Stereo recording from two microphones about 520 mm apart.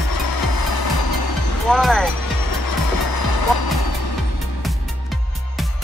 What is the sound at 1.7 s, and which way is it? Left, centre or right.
Music, centre.